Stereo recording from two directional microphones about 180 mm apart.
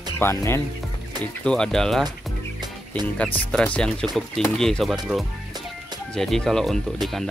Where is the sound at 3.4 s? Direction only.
5° left (ahead or behind).